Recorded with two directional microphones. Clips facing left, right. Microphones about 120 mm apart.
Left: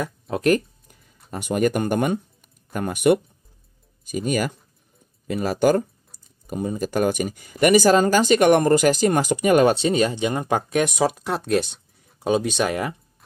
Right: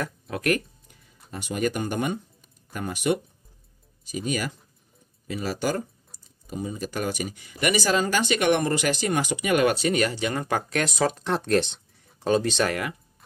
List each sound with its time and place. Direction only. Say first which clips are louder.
0.3 s speech: left 6 dB; 30° left (ahead or behind)
1.3 s speech: left 6 dB; 50° left (ahead or behind)
4.3 s speech: left 5 dB; 50° left (ahead or behind); by 12.7 s 10° left (ahead or behind)